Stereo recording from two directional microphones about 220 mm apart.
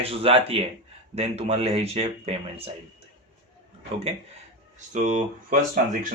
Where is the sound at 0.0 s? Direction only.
25° right (ahead or behind).